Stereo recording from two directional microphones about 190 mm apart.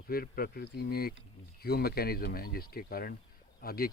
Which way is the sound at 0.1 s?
50° left (ahead or behind).